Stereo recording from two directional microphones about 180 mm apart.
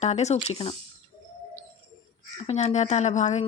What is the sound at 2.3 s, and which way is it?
Speech, 35° left (ahead or behind).